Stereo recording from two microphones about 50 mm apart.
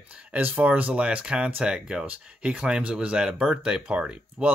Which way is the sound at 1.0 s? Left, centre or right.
Centre.